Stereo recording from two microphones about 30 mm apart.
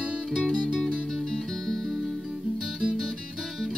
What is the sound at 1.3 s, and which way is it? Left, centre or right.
Music, centre.